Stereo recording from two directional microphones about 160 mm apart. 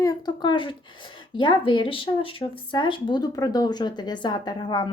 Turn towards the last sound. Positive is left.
turn(degrees=25)  # may be behind; listen again after turning